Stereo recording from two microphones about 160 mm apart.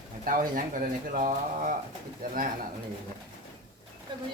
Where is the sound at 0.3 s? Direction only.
60° right (ahead or behind).